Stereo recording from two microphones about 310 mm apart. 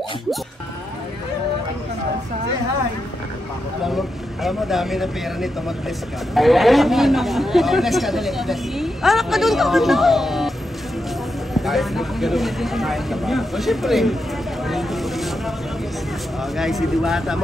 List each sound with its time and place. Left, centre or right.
3.8 s speech: centre
11.5 s speech: centre
14.7 s boat: centre
16.5 s speech: centre